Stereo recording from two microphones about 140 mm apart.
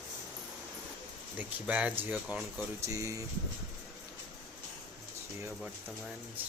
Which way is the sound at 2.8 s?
25° right (ahead or behind).